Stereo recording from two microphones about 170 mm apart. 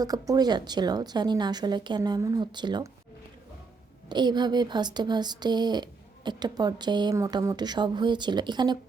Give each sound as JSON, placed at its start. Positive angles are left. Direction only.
{"t": 0.0, "sound": "speech", "side_deg": -20}
{"t": 4.1, "sound": "speech", "side_deg": -25}